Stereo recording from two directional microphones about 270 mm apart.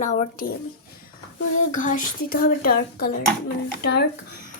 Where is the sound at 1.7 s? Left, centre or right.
Left.